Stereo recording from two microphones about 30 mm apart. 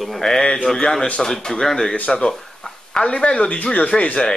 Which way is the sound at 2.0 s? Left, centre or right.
Left.